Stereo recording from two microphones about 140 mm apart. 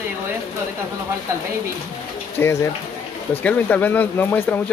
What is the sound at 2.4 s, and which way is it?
Speech, 15° left (ahead or behind).